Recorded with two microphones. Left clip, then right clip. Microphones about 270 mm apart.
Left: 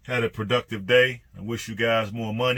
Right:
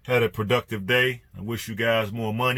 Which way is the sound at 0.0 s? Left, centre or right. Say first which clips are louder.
Right 4 dB; right.